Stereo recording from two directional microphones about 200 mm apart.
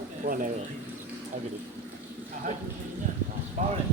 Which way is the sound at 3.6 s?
40° right (ahead or behind).